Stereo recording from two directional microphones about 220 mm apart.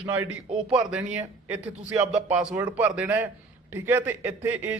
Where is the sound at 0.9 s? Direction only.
5° right (ahead or behind).